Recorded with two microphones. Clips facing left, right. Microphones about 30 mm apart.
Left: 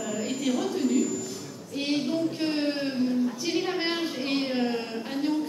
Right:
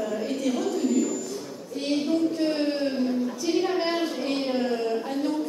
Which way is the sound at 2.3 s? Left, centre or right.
Centre.